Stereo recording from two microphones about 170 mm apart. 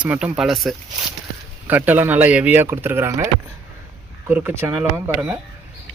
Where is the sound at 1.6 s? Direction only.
10° right (ahead or behind).